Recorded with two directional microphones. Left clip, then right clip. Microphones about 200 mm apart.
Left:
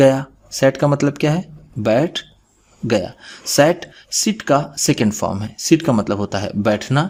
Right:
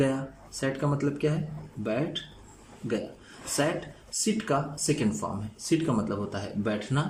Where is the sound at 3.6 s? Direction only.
50° left (ahead or behind).